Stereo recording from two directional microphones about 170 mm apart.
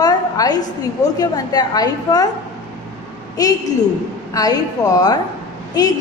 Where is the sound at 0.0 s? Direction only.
20° left (ahead or behind).